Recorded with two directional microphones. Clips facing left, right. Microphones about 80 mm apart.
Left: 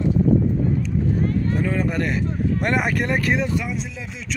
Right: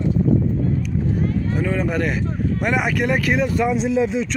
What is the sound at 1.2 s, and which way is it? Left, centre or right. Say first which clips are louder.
Run: even; centre.